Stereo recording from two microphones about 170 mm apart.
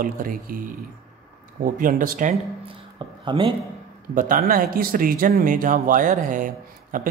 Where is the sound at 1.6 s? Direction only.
50° right (ahead or behind).